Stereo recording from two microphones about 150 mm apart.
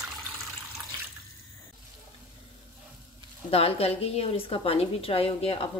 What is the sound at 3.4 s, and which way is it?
Speech, 40° left (ahead or behind).